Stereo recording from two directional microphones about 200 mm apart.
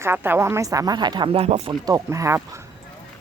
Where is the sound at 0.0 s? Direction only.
10° right (ahead or behind); by 1.7 s 30° right (ahead or behind).